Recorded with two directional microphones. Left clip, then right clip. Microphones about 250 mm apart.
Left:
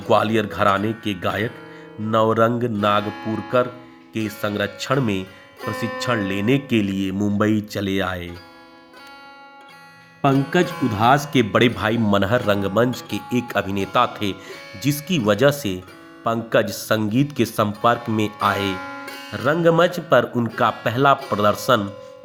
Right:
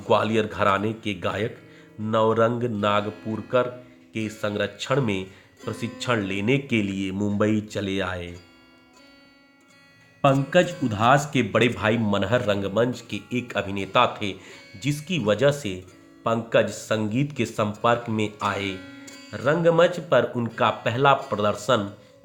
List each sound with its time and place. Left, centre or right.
0.1 s speech: centre
10.5 s speech: centre